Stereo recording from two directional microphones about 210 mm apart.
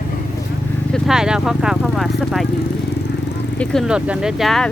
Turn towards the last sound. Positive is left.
turn(degrees=0)  # may be behind; listen again after turning